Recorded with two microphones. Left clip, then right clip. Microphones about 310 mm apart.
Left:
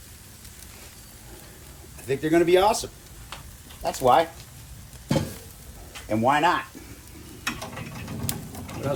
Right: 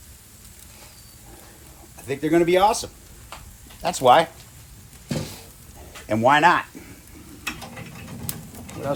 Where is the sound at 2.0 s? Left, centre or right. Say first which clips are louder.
Right 1 dB; centre.